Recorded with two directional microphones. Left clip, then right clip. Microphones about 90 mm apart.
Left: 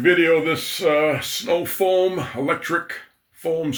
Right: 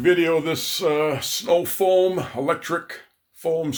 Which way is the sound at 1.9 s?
20° right (ahead or behind).